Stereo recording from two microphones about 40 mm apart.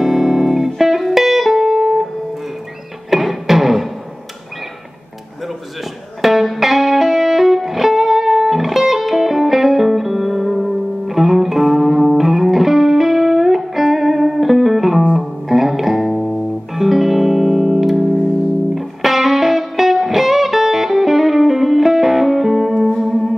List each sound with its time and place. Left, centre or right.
0.0 s music: centre
3.1 s music: centre
6.2 s music: centre